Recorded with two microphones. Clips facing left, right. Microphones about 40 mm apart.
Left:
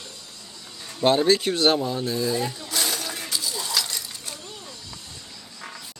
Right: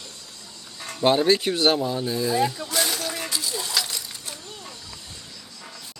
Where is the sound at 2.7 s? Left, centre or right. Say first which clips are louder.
Right 2 dB; centre.